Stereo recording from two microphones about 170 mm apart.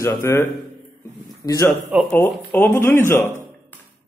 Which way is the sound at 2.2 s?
15° left (ahead or behind).